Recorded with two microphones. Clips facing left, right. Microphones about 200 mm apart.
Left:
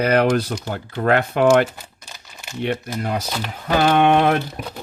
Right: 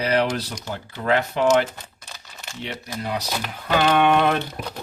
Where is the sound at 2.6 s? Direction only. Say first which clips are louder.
Left 8 dB; 55° left (ahead or behind).